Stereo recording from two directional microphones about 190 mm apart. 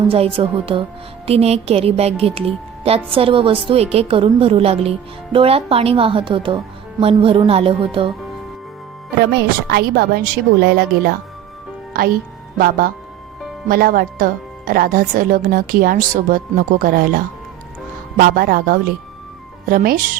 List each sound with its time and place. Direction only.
0.1 s a woman's voice: 30° right (ahead or behind)
9.2 s speech: 55° right (ahead or behind)
12.5 s speech: 50° right (ahead or behind)